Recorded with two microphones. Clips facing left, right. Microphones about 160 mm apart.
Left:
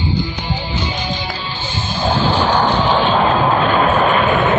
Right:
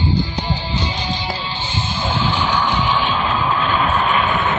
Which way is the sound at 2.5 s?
45° left (ahead or behind).